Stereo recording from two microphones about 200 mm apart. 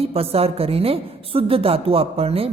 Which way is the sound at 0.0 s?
30° right (ahead or behind).